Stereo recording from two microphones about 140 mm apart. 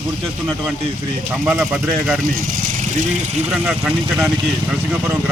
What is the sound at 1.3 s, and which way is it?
Speech, 10° right (ahead or behind).